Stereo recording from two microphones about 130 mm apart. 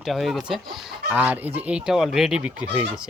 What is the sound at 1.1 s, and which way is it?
Speech, 10° right (ahead or behind).